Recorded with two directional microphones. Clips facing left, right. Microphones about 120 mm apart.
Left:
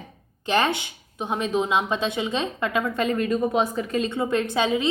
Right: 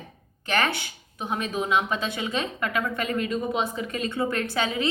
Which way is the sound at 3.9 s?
20° left (ahead or behind).